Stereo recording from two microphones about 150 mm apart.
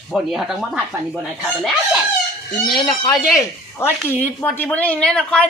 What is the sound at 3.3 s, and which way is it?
Speech, 15° left (ahead or behind).